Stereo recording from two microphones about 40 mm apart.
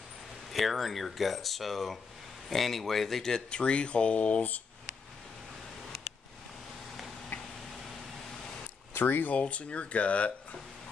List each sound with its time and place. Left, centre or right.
0.5 s speech: centre; by 4.4 s left
8.9 s speech: left
9.3 s speech: left